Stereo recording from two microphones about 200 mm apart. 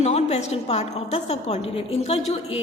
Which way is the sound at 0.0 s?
30° left (ahead or behind).